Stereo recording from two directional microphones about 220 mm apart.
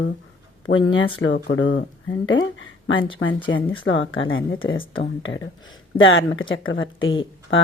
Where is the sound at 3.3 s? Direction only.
20° left (ahead or behind).